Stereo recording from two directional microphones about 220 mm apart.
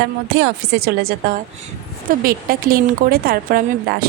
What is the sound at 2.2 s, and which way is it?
A woman's voice, 40° right (ahead or behind).